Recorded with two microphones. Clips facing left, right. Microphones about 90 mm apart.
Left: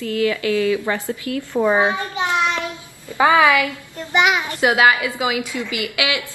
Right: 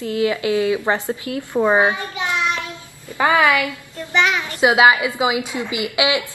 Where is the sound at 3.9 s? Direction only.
15° left (ahead or behind).